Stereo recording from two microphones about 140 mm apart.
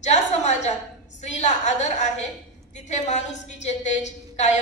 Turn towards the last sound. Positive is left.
turn(degrees=55)  # may be behind; listen again after turning